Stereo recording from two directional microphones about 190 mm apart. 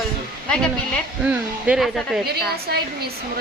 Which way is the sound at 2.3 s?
55° right (ahead or behind).